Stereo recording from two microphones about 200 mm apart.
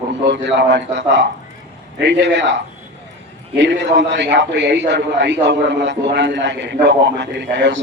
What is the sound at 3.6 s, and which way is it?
A man's voice, 60° right (ahead or behind).